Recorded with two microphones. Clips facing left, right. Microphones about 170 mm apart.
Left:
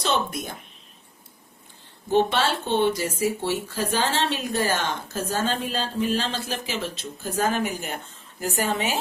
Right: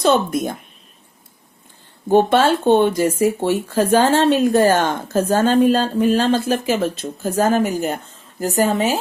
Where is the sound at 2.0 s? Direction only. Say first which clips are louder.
Right 8 dB; 50° right (ahead or behind).